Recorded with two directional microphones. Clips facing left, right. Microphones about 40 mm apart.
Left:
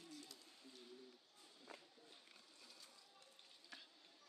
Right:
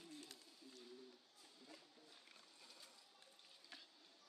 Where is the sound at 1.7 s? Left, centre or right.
Left.